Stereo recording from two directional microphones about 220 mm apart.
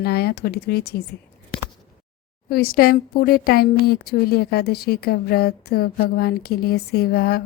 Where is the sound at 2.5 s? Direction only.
45° left (ahead or behind).